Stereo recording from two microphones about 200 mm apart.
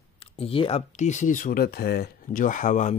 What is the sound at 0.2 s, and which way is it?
Speech, 25° left (ahead or behind).